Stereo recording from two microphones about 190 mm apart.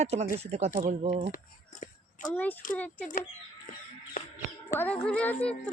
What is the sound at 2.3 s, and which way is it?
Speech, 10° left (ahead or behind).